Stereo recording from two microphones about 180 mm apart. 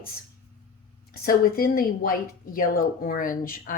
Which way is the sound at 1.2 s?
55° left (ahead or behind).